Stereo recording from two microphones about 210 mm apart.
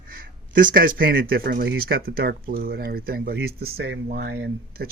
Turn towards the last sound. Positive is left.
turn(degrees=-50)  # may be behind; listen again after turning